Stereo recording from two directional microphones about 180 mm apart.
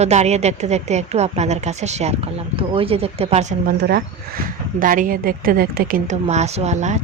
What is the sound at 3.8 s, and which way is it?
Speech, 55° right (ahead or behind).